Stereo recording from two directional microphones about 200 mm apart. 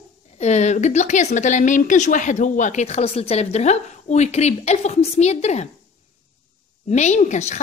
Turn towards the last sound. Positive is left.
turn(degrees=35)  # may be behind; listen again after turning